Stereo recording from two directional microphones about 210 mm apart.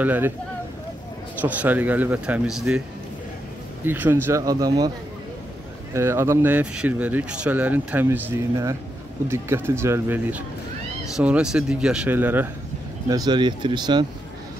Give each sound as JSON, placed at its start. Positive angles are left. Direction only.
{"t": 0.0, "sound": "speech", "side_deg": -10}
{"t": 1.4, "sound": "speech", "side_deg": -10}
{"t": 3.8, "sound": "speech", "side_deg": -10}
{"t": 5.9, "sound": "speech", "side_deg": -10}
{"t": 13.1, "sound": "speech", "side_deg": -20}